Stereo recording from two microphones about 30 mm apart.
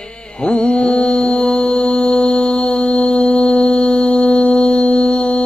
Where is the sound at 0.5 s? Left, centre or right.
Left.